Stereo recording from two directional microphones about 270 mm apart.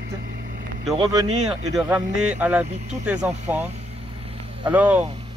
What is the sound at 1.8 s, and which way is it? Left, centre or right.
Speech, centre.